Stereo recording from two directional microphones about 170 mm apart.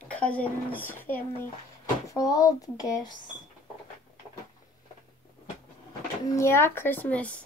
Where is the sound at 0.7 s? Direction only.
10° left (ahead or behind).